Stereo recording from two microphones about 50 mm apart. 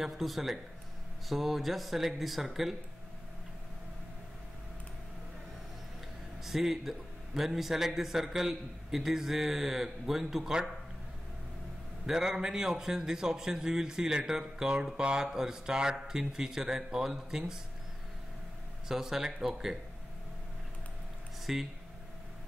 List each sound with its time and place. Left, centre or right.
0.0 s speech: centre
6.4 s a man's voice: centre
12.1 s a man's voice: centre
18.9 s a man's voice: centre
21.5 s a man's voice: centre